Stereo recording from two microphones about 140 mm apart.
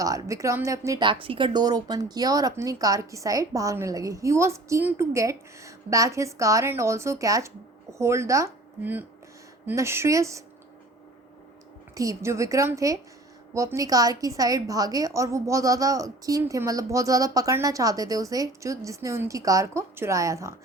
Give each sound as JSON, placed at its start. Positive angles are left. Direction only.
{"t": 0.0, "sound": "speech", "side_deg": -25}
{"t": 1.0, "sound": "speech", "side_deg": -40}
{"t": 11.9, "sound": "speech", "side_deg": -20}